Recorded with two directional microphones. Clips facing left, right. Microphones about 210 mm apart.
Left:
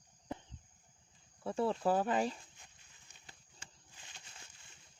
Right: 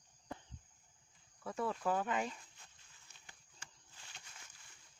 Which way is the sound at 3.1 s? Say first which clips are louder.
Left 2 dB; 15° left (ahead or behind).